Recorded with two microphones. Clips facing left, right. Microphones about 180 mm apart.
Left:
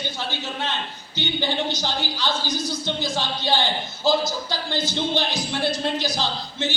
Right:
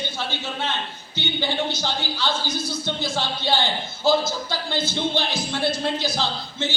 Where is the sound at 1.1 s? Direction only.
15° left (ahead or behind).